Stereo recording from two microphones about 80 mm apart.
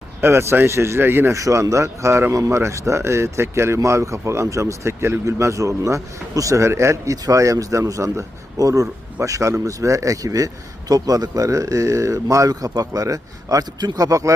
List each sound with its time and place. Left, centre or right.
0.2 s speech: right
1.4 s a man's voice: right